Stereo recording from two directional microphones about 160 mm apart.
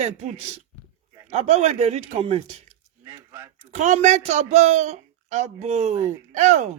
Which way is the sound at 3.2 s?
15° right (ahead or behind).